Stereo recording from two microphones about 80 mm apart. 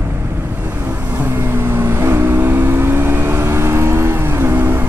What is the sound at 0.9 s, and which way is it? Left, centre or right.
Vehicle, right.